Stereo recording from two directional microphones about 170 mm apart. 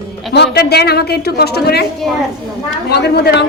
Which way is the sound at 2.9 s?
75° left (ahead or behind).